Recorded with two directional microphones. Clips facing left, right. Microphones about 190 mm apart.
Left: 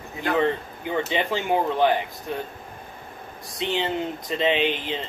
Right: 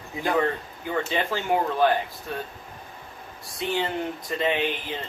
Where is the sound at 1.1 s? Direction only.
20° left (ahead or behind).